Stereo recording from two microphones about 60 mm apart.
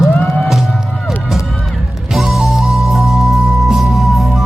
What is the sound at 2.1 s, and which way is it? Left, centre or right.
Music, centre.